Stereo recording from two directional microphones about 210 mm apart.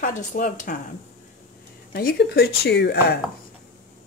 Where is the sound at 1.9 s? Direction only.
50° left (ahead or behind).